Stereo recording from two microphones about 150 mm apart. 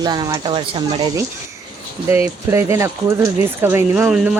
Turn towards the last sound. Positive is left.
turn(degrees=-10)  # may be behind; listen again after turning